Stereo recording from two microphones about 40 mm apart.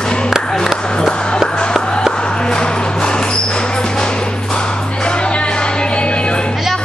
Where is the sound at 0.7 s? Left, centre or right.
Left.